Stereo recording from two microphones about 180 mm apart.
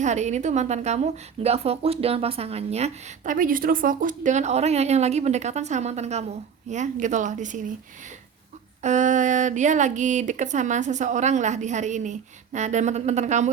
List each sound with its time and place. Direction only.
0.0 s a woman's voice: 40° right (ahead or behind)
8.8 s a woman's voice: 40° right (ahead or behind)